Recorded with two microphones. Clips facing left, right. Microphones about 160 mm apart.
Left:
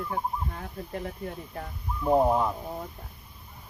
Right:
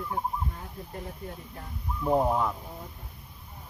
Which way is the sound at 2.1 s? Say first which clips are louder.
Left 3 dB; 15° left (ahead or behind).